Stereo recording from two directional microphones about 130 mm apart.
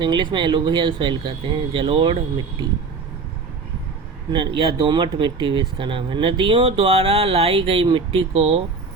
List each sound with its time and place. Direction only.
0.0 s speech: 40° right (ahead or behind)
4.3 s speech: 40° right (ahead or behind)